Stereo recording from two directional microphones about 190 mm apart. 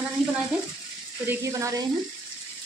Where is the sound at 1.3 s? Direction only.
15° right (ahead or behind).